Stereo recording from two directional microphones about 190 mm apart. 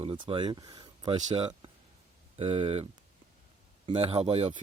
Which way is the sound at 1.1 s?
40° right (ahead or behind).